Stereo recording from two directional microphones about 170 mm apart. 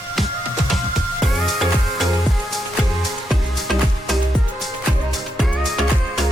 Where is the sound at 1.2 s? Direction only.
Centre (ahead or behind).